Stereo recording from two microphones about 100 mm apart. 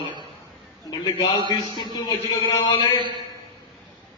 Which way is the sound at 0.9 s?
45° left (ahead or behind).